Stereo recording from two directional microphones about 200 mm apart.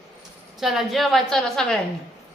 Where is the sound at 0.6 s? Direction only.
Centre (ahead or behind).